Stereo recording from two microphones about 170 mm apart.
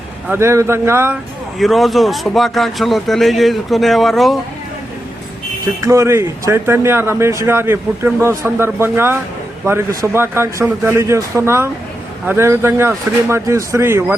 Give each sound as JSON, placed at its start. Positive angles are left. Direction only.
{"t": 0.3, "sound": "speech", "side_deg": -15}
{"t": 1.5, "sound": "speech", "side_deg": 0}
{"t": 5.6, "sound": "speech", "side_deg": -20}